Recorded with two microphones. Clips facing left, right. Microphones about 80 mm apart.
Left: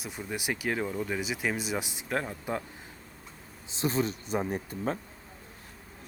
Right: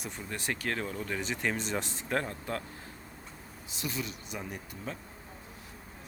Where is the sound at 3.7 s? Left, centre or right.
Left.